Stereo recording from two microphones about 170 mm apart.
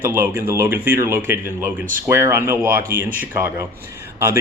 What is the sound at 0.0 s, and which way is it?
Speech, 15° right (ahead or behind).